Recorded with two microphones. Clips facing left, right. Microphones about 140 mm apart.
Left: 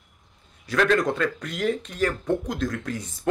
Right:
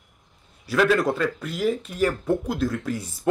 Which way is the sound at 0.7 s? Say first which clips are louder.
Right 1 dB; 5° right (ahead or behind).